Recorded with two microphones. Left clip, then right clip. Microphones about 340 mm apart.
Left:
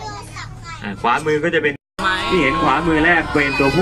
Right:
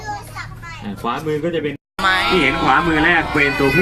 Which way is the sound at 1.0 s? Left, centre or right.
Left.